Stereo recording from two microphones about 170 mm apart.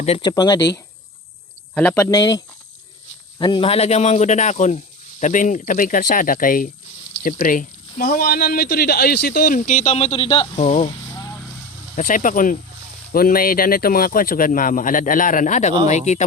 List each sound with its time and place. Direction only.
0.0 s speech: 35° left (ahead or behind)
0.3 s speech: 20° left (ahead or behind)
1.7 s speech: 10° left (ahead or behind)
2.0 s speech: 20° left (ahead or behind); by 10.9 s 40° left (ahead or behind)
11.1 s vehicle: 20° left (ahead or behind)
11.9 s speech: 50° left (ahead or behind)